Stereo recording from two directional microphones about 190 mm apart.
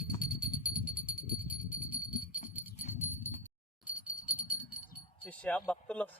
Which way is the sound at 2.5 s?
10° right (ahead or behind).